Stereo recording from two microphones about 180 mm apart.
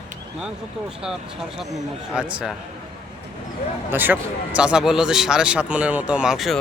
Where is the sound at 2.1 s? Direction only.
5° right (ahead or behind).